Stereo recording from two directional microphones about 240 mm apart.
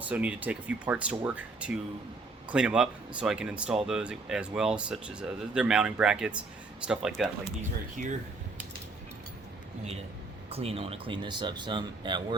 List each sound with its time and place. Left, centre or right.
0.0 s speech: centre
8.0 s speech: right
10.5 s speech: right